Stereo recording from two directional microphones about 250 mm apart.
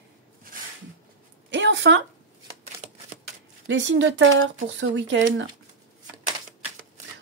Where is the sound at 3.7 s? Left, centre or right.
Right.